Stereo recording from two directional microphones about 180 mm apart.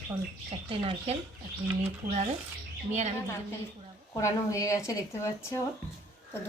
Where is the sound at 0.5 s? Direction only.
30° right (ahead or behind).